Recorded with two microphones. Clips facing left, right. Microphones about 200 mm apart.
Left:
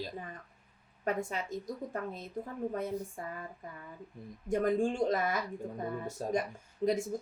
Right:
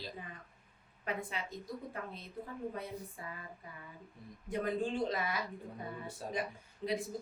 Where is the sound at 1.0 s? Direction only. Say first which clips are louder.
Left 6 dB; 45° left (ahead or behind).